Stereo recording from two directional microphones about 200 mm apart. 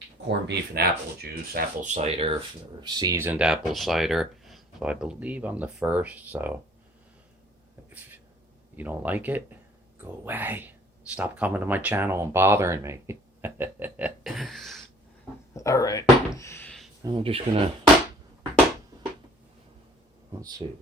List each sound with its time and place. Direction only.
0.3 s speech: 55° right (ahead or behind); by 2.3 s 30° right (ahead or behind)
2.8 s speech: 20° right (ahead or behind)
8.7 s speech: 10° right (ahead or behind)
15.5 s a sound: 15° left (ahead or behind)
17.0 s speech: 25° right (ahead or behind)
20.4 s speech: 20° right (ahead or behind)